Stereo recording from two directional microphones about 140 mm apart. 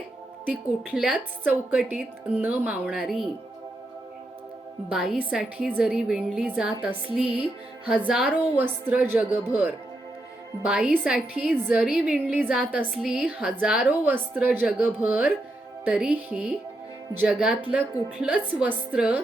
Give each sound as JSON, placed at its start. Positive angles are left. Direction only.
{"t": 0.4, "sound": "a woman's voice", "side_deg": -5}
{"t": 4.9, "sound": "a woman's voice", "side_deg": -5}